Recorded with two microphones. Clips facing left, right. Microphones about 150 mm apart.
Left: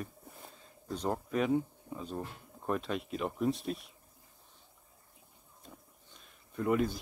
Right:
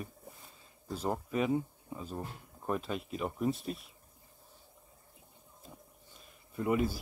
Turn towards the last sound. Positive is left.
turn(degrees=-5)  # may be behind; listen again after turning